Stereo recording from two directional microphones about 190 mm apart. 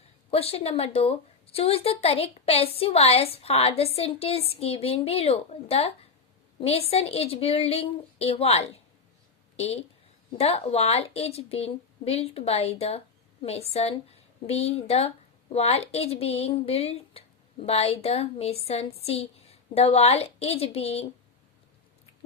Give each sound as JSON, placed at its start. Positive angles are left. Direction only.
{"t": 0.3, "sound": "a woman's voice", "side_deg": 30}
{"t": 10.3, "sound": "a woman's voice", "side_deg": 35}